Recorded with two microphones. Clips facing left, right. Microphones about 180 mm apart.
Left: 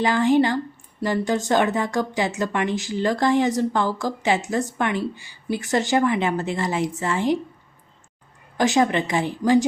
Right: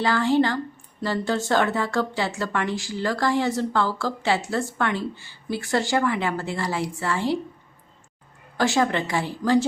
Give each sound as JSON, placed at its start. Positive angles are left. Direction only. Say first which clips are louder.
{"t": 0.0, "sound": "speech", "louder": "left 2 dB", "side_deg": 15}
{"t": 8.5, "sound": "speech", "louder": "left 3 dB", "side_deg": 20}